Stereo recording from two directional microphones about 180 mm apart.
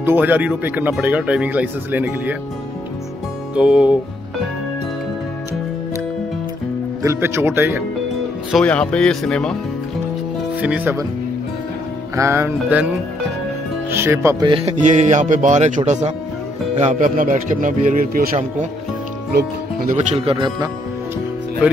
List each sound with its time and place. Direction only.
0.0 s speech: 10° right (ahead or behind)
3.5 s speech: 5° right (ahead or behind)
7.0 s speech: 15° right (ahead or behind)
8.5 s speech: 5° left (ahead or behind)
10.6 s speech: 10° right (ahead or behind)
12.2 s speech: 15° right (ahead or behind)
13.9 s speech: 15° right (ahead or behind)
14.8 s speech: 40° right (ahead or behind)
20.0 s speech: 35° right (ahead or behind)